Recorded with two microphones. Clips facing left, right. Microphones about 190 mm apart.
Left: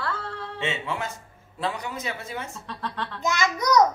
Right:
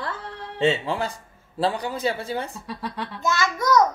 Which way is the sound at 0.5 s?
35° right (ahead or behind).